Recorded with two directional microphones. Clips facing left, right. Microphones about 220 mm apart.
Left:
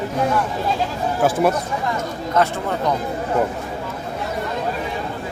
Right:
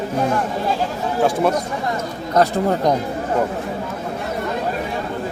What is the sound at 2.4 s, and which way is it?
Speech, 40° right (ahead or behind).